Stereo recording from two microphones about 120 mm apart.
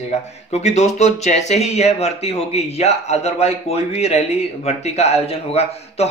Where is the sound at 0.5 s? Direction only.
70° left (ahead or behind).